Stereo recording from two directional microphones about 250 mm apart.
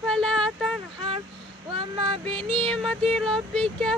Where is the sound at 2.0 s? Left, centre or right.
Right.